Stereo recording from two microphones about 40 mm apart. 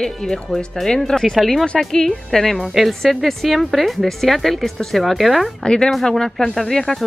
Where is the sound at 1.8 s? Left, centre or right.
Centre.